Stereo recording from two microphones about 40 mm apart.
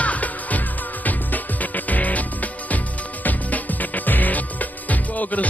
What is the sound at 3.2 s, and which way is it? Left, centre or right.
Music, left.